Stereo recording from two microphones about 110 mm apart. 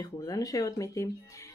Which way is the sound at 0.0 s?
35° left (ahead or behind).